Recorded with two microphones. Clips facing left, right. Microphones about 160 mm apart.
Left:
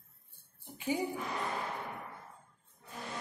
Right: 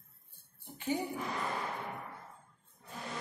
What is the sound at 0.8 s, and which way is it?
Speech, 10° left (ahead or behind).